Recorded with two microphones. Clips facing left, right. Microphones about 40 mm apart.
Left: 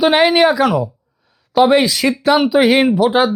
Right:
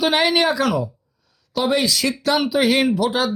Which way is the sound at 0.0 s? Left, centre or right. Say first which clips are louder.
Left 6 dB; centre.